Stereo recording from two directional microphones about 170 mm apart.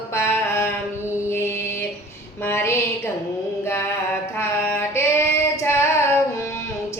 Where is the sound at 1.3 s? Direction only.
15° left (ahead or behind).